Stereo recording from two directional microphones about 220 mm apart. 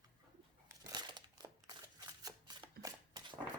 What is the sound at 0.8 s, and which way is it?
Crumpling, 20° right (ahead or behind).